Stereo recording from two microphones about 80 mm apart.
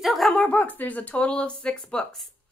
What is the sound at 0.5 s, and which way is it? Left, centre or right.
A woman's voice, left.